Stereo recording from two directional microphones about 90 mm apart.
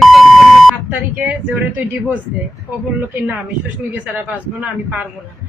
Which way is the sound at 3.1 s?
15° right (ahead or behind).